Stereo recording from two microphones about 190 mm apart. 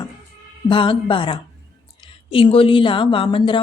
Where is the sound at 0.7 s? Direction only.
25° left (ahead or behind).